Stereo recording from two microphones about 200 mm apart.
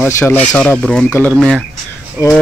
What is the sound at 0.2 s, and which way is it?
Speech, 10° left (ahead or behind).